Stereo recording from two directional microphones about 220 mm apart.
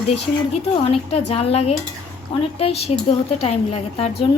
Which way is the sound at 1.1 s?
30° left (ahead or behind).